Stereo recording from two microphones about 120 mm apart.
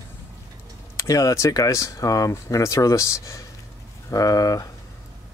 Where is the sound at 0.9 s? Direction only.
30° left (ahead or behind).